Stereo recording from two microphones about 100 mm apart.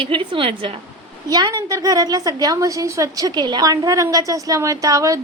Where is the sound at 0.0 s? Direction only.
60° right (ahead or behind).